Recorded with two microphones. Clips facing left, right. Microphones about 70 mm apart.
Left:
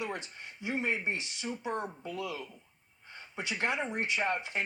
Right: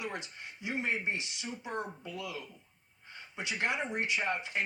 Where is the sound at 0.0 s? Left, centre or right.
Left.